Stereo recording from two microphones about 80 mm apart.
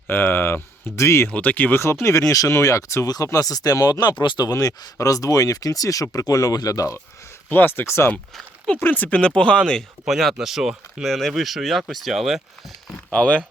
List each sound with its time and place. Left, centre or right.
0.1 s speech: left
1.3 s speech: centre
1.8 s speech: left
4.0 s speech: left
4.5 s speech: left
7.5 s speech: left
8.8 s speech: left
10.1 s speech: centre
11.0 s speech: centre
13.1 s speech: centre